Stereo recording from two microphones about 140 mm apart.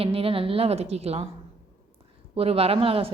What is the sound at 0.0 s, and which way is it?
A woman's voice, 45° right (ahead or behind).